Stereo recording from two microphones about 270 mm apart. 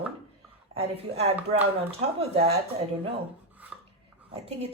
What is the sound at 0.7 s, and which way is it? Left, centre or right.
Speech, right.